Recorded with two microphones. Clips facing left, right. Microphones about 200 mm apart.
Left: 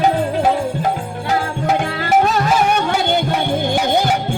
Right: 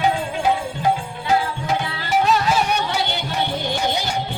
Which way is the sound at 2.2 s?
50° left (ahead or behind).